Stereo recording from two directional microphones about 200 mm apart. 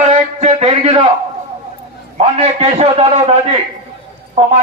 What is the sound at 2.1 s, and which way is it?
A man's voice, 30° right (ahead or behind).